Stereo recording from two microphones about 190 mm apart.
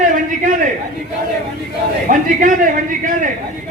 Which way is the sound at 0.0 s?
45° right (ahead or behind).